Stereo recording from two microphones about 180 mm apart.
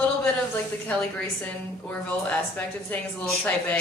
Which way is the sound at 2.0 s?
10° left (ahead or behind).